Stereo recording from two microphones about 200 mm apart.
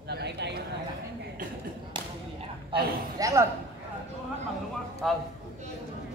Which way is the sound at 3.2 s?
15° right (ahead or behind).